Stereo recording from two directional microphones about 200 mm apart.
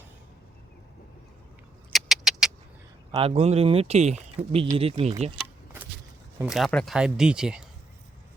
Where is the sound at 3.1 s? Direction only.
30° right (ahead or behind).